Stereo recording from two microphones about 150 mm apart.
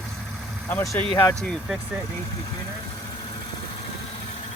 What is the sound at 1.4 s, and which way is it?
Speech, 5° left (ahead or behind).